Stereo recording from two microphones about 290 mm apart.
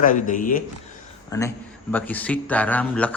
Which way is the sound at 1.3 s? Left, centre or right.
Centre.